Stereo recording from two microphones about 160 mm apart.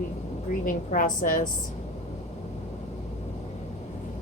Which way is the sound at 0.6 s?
60° left (ahead or behind).